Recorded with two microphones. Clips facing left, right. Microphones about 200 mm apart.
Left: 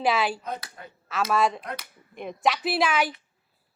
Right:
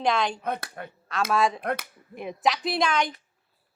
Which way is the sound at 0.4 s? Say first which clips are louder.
Right 4 dB; 60° right (ahead or behind).